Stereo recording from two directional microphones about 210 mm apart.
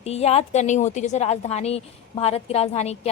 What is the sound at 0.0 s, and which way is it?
A woman's voice, 30° left (ahead or behind).